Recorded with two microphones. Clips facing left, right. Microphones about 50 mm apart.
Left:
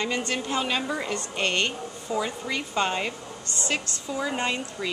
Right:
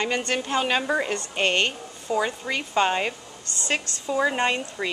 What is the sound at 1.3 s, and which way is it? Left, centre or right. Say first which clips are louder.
A woman's voice: right 3 dB; centre.